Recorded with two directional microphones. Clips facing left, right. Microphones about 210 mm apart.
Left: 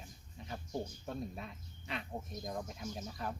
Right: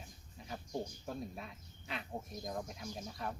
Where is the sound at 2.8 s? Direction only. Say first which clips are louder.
Left 2 dB; 10° right (ahead or behind).